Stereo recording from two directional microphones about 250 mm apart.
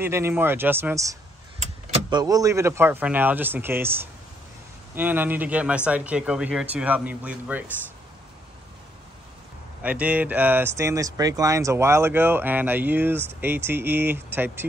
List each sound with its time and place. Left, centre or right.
0.0 s speech: centre
9.8 s speech: centre